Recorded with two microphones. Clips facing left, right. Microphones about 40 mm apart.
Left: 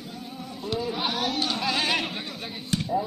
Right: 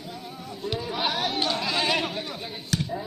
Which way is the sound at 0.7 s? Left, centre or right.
Right.